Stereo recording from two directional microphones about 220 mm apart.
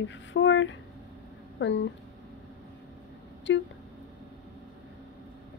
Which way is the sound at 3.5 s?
60° left (ahead or behind).